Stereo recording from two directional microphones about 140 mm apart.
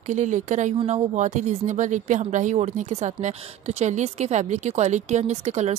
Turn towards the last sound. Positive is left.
turn(degrees=-50)  # may be behind; listen again after turning